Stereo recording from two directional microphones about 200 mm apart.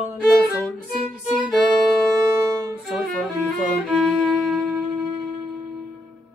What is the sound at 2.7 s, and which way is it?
Music, centre (ahead or behind).